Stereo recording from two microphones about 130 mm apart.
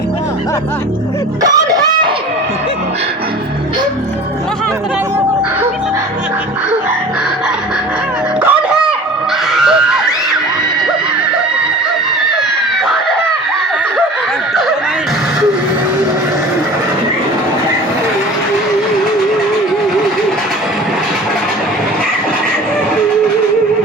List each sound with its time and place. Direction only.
1.4 s chicken: 30° right (ahead or behind)
8.4 s a sound: 5° right (ahead or behind)
9.5 s screaming: 5° right (ahead or behind)